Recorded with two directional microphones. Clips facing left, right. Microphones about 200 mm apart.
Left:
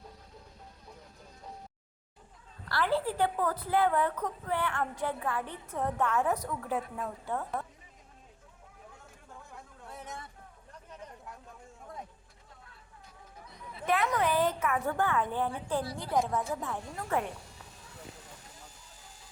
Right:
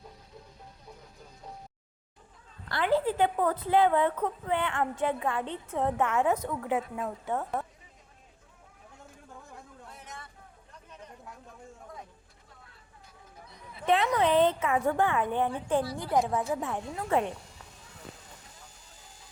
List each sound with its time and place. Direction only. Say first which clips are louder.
2.6 s a woman's voice: right 3 dB; 20° right (ahead or behind)
13.8 s a woman's voice: right 4 dB; 25° right (ahead or behind)